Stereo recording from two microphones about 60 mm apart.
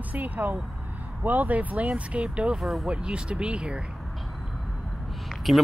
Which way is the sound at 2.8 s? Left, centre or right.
Centre.